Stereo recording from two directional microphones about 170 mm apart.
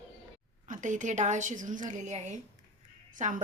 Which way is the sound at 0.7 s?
45° right (ahead or behind).